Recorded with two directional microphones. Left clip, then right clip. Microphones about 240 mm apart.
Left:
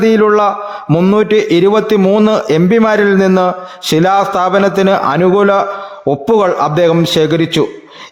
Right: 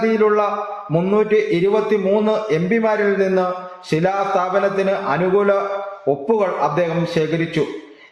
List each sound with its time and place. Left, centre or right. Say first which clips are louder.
0.0 s a man's voice: left 7 dB; left